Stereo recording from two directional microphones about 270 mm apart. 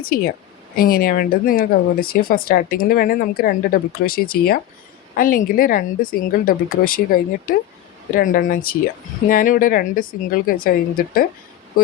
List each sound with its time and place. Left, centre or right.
0.0 s speech: left